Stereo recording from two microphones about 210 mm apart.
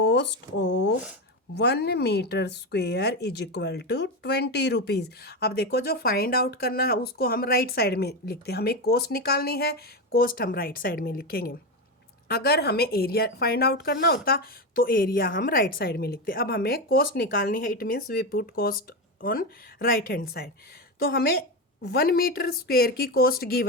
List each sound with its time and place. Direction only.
0.0 s speech: 55° left (ahead or behind)